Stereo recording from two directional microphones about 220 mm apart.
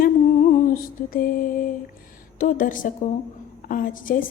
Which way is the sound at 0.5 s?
40° left (ahead or behind).